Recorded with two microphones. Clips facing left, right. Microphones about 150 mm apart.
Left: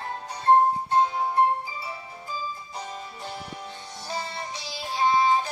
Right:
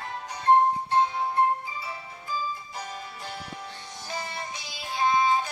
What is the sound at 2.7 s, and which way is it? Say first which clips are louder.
Music: left 1 dB; 25° left (ahead or behind).